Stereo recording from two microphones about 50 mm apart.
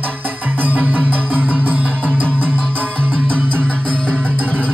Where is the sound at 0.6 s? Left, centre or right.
Right.